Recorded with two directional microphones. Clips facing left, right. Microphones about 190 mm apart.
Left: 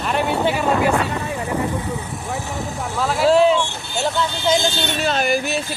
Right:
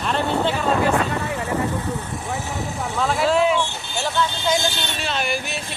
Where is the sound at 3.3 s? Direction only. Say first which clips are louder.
Left 6 dB; 30° left (ahead or behind).